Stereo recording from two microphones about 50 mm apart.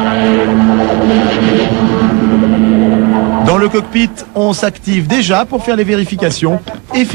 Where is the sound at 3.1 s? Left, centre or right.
Centre.